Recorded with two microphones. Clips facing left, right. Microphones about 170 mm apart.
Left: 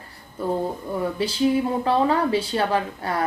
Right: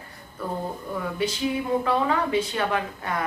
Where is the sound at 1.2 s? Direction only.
30° left (ahead or behind).